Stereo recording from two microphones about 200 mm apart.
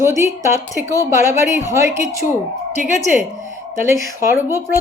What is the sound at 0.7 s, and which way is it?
Speech, 15° left (ahead or behind).